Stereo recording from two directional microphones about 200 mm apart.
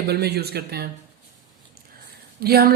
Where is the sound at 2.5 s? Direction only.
50° right (ahead or behind).